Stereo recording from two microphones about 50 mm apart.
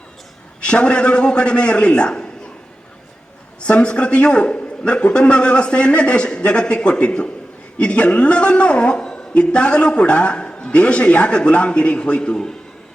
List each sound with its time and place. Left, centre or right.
0.6 s a man's voice: left
3.6 s a man's voice: left